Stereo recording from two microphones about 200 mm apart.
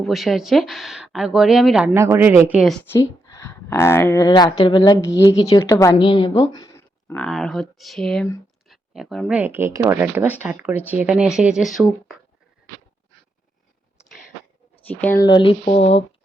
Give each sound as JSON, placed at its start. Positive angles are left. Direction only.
{"t": 0.0, "sound": "speech", "side_deg": 0}
{"t": 2.9, "sound": "a woman's voice", "side_deg": 15}
{"t": 6.5, "sound": "a sound", "side_deg": 15}
{"t": 7.3, "sound": "speech", "side_deg": 0}
{"t": 14.0, "sound": "a sound", "side_deg": 0}
{"t": 15.0, "sound": "speech", "side_deg": 15}